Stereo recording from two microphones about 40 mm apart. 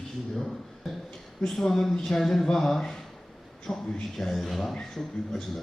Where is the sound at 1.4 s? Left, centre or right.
Centre.